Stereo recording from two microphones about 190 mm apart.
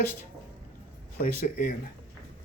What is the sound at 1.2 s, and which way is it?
Speech, 45° left (ahead or behind).